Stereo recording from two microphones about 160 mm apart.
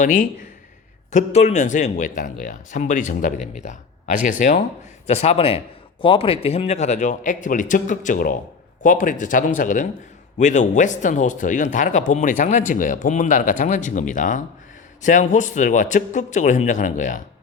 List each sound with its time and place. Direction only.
0.0 s speech: 55° left (ahead or behind)
1.1 s speech: 40° left (ahead or behind)
5.0 s speech: 40° left (ahead or behind)